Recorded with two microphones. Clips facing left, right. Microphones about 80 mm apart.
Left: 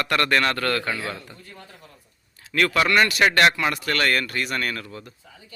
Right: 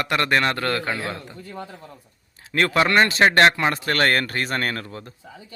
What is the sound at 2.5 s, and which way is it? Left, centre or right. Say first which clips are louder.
Speech: right 1 dB; right.